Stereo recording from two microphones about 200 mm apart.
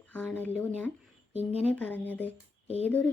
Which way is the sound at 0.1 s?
10° left (ahead or behind).